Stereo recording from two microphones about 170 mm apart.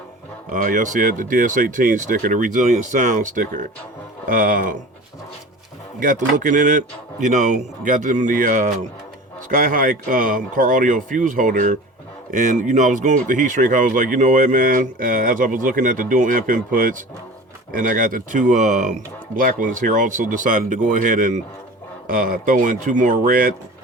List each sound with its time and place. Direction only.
0.5 s speech: 50° right (ahead or behind)
6.0 s speech: 50° right (ahead or behind)